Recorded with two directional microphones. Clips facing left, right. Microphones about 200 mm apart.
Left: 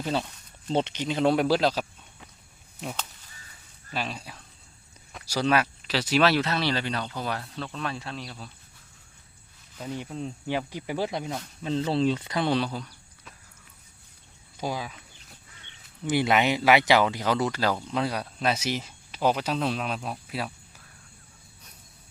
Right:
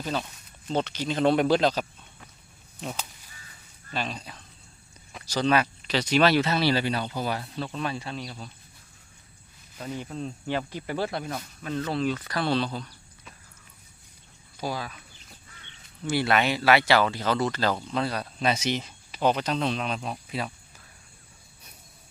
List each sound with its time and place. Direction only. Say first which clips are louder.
0.0 s speech: left 2 dB; 25° left (ahead or behind)
1.0 s speech: right 2 dB; 10° left (ahead or behind)
3.9 s speech: right 1 dB; 5° left (ahead or behind)
10.0 s speech: even; 15° left (ahead or behind)
14.6 s speech: even; 15° left (ahead or behind)
16.0 s speech: left 1 dB; 15° left (ahead or behind)